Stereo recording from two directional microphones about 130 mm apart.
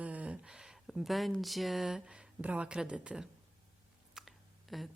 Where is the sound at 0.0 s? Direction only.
10° right (ahead or behind).